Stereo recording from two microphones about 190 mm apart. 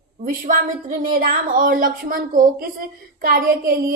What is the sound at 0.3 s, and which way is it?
A woman's voice, 45° right (ahead or behind).